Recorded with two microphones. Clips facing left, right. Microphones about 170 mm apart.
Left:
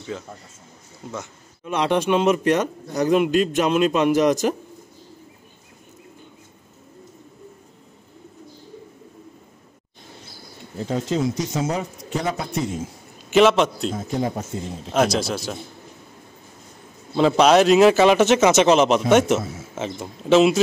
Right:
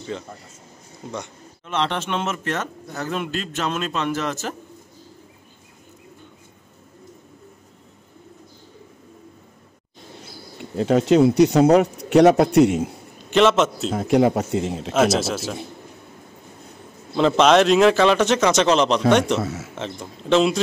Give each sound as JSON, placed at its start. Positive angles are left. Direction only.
{"t": 1.1, "sound": "a man's voice", "side_deg": 5}
{"t": 10.8, "sound": "speech", "side_deg": -75}
{"t": 13.3, "sound": "a man's voice", "side_deg": 0}
{"t": 13.9, "sound": "speech", "side_deg": -75}
{"t": 14.9, "sound": "a man's voice", "side_deg": -5}
{"t": 17.2, "sound": "a man's voice", "side_deg": 5}
{"t": 19.4, "sound": "speech", "side_deg": -75}
{"t": 19.7, "sound": "a man's voice", "side_deg": 5}